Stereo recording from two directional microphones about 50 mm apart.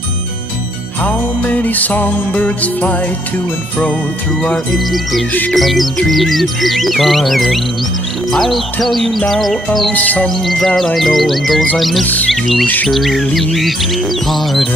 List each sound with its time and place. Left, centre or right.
1.0 s music: left
4.7 s music: centre
9.9 s music: left
10.4 s music: centre